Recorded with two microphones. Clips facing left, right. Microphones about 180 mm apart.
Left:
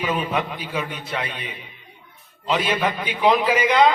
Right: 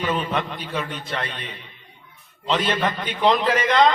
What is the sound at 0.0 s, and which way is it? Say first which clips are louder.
A man's voice: left 1 dB; 10° left (ahead or behind).